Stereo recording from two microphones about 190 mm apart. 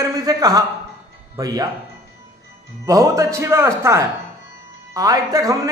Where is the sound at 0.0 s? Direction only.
20° right (ahead or behind).